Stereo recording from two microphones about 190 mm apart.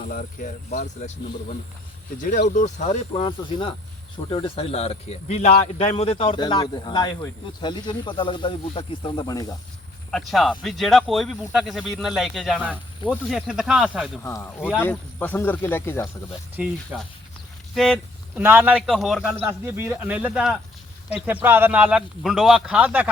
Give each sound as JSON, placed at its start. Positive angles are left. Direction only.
{"t": 0.0, "sound": "a man's voice", "side_deg": 45}
{"t": 10.1, "sound": "speech", "side_deg": 0}
{"t": 14.2, "sound": "speech", "side_deg": 15}
{"t": 16.6, "sound": "a man's voice", "side_deg": -5}
{"t": 17.7, "sound": "speech", "side_deg": 0}
{"t": 18.3, "sound": "a man's voice", "side_deg": -10}